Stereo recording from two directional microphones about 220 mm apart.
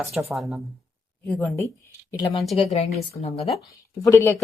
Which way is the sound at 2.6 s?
30° left (ahead or behind).